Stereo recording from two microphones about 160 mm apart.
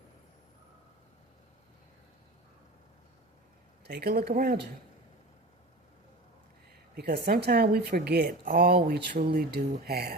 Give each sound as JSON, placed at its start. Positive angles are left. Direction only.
{"t": 3.8, "sound": "speech", "side_deg": -90}
{"t": 6.9, "sound": "speech", "side_deg": -90}